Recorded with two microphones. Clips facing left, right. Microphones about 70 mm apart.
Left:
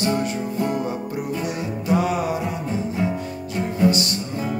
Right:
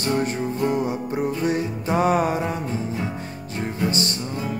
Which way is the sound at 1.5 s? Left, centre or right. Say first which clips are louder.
Right 1 dB; right.